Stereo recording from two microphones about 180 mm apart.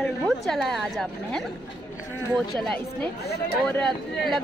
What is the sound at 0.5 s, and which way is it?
A woman's voice, centre (ahead or behind).